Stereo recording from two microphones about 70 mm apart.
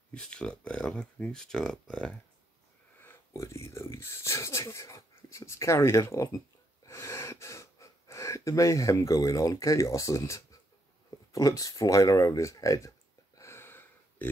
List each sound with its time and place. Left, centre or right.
0.1 s speech: centre
3.3 s speech: left
6.8 s gasp: left
11.3 s speech: left
13.4 s a sound: left